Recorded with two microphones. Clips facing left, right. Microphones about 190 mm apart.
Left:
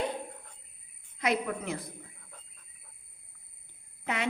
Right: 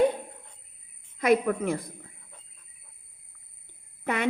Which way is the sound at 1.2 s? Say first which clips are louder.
Right 8 dB; 55° right (ahead or behind).